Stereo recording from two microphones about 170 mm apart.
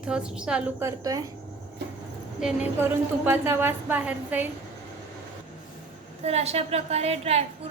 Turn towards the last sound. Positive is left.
turn(degrees=-35)  # may be behind; listen again after turning